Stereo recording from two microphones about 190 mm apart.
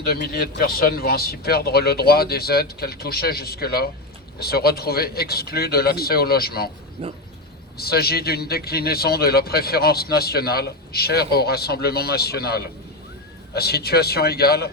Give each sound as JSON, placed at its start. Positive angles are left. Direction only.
{"t": 0.0, "sound": "a man's voice", "side_deg": 55}
{"t": 7.0, "sound": "speech", "side_deg": -30}
{"t": 7.8, "sound": "a man's voice", "side_deg": 55}